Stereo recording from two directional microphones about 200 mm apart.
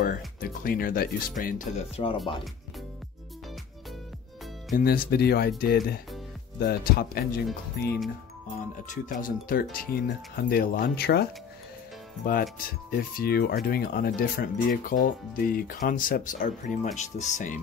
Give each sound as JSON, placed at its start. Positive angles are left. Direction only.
{"t": 0.0, "sound": "speech", "side_deg": 45}
{"t": 4.7, "sound": "speech", "side_deg": 50}
{"t": 8.8, "sound": "speech", "side_deg": 40}
{"t": 12.3, "sound": "speech", "side_deg": 45}